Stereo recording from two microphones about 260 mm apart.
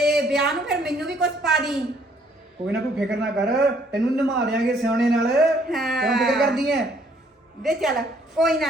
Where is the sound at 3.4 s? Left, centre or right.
Right.